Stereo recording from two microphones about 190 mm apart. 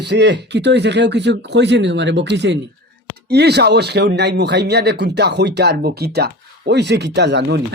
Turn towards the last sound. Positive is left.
turn(degrees=-65)  # may be behind; listen again after turning